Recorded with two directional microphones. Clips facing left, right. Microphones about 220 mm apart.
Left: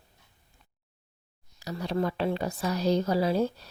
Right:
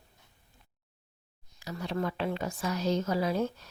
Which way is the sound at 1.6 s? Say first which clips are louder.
Left 4 dB; 35° left (ahead or behind).